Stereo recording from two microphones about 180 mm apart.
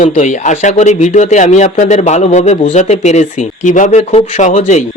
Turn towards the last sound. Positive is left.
turn(degrees=40)  # may be behind; listen again after turning